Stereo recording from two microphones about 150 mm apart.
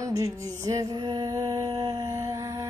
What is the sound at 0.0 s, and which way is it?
Music, 20° right (ahead or behind).